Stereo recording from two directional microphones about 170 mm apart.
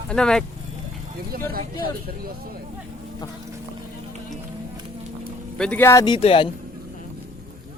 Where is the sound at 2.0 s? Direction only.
60° right (ahead or behind).